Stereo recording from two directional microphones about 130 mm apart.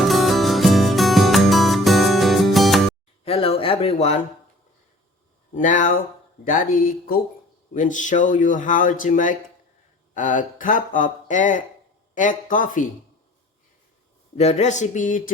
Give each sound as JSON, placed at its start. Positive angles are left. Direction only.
{"t": 0.0, "sound": "music", "side_deg": 0}
{"t": 3.2, "sound": "a sound", "side_deg": 50}
{"t": 5.5, "sound": "speech", "side_deg": 80}
{"t": 7.7, "sound": "speech", "side_deg": 80}
{"t": 12.1, "sound": "speech", "side_deg": 85}
{"t": 14.3, "sound": "speech", "side_deg": 60}